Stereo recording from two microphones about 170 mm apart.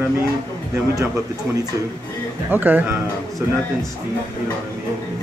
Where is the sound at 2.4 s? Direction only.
10° right (ahead or behind).